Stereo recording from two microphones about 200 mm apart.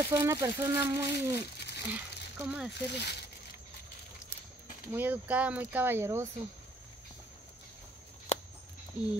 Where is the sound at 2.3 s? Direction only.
5° right (ahead or behind).